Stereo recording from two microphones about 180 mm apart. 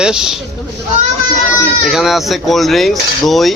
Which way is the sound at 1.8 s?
Centre (ahead or behind).